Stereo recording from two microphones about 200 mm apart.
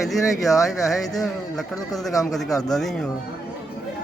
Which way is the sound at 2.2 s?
Centre (ahead or behind).